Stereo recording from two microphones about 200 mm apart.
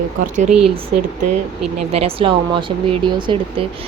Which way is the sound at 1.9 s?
30° right (ahead or behind).